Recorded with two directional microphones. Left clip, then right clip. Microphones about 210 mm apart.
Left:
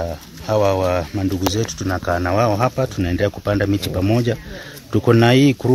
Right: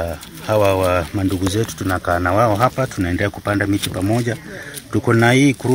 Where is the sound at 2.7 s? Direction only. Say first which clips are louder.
Right 1 dB; 30° left (ahead or behind).